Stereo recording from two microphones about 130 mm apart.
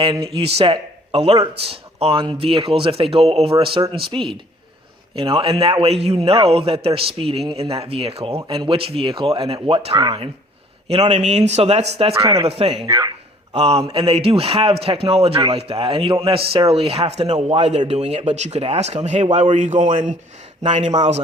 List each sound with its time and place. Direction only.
0.0 s speech: 45° right (ahead or behind)
9.9 s speech: 30° right (ahead or behind)
10.8 s speech: 55° right (ahead or behind)
12.8 s speech: 30° right (ahead or behind)
13.5 s speech: 55° right (ahead or behind); by 20.1 s 75° right (ahead or behind)
20.6 s speech: 60° right (ahead or behind)